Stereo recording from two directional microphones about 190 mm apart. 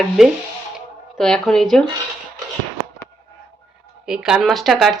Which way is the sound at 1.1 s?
Centre (ahead or behind).